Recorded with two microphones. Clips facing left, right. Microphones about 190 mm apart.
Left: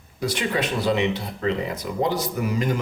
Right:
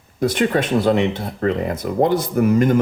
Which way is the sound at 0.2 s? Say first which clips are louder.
Right 7 dB; 50° right (ahead or behind).